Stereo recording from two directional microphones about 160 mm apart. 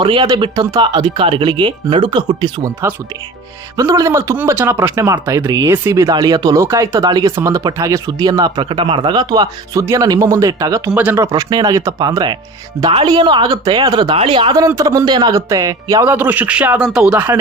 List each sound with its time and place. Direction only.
0.0 s speech: 30° right (ahead or behind)
3.8 s speech: 20° right (ahead or behind)
10.9 s a man's voice: 10° right (ahead or behind)
11.2 s speech: 20° right (ahead or behind)
16.0 s a man's voice: 10° right (ahead or behind)